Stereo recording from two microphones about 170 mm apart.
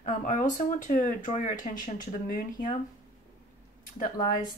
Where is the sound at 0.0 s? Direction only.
45° left (ahead or behind).